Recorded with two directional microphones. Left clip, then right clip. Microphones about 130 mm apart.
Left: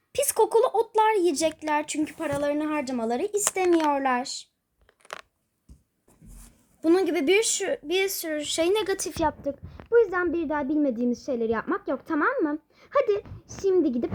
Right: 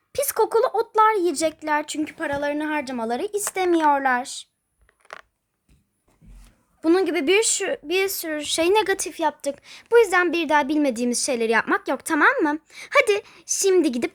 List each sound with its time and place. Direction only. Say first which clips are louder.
0.1 s speech: right 1 dB; 25° right (ahead or behind)
6.8 s a woman's voice: right 2 dB; 35° right (ahead or behind)
9.0 s a woman's voice: right 3 dB; 25° right (ahead or behind)